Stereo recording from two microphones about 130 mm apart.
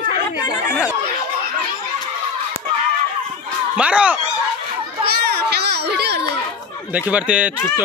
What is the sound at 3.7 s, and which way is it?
Speech, 10° right (ahead or behind).